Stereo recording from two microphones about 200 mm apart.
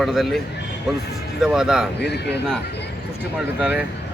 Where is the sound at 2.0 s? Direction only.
55° left (ahead or behind).